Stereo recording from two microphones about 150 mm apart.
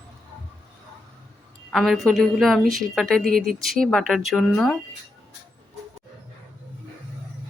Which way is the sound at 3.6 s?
Centre (ahead or behind).